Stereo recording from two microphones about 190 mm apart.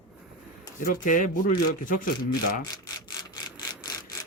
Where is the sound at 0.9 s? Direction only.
45° left (ahead or behind).